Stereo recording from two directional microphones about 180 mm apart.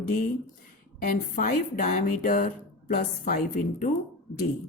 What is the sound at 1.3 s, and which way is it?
A woman's voice, 45° left (ahead or behind).